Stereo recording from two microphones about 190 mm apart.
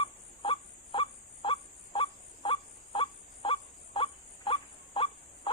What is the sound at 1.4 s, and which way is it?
Goose, 25° left (ahead or behind).